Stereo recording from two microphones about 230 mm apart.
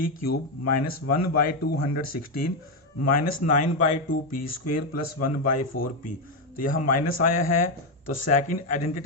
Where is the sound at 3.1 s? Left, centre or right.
Left.